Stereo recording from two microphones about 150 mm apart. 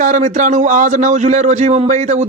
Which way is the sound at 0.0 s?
55° right (ahead or behind).